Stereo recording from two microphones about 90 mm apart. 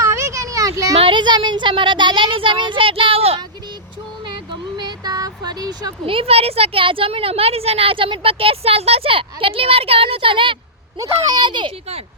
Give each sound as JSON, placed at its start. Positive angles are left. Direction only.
{"t": 0.0, "sound": "vehicle", "side_deg": -35}
{"t": 0.9, "sound": "speech", "side_deg": -75}
{"t": 4.8, "sound": "vehicle", "side_deg": -50}
{"t": 6.1, "sound": "a woman's voice", "side_deg": -90}
{"t": 10.9, "sound": "a child's voice", "side_deg": -40}
{"t": 11.3, "sound": "a child's voice", "side_deg": -60}